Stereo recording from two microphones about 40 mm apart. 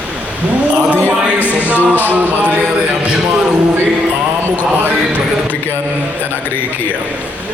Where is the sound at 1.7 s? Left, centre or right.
Left.